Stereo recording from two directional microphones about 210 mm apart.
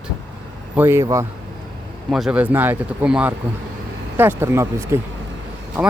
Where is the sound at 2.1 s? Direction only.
5° right (ahead or behind).